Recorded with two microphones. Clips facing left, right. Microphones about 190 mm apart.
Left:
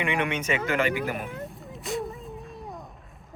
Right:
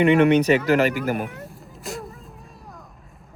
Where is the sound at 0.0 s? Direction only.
40° right (ahead or behind).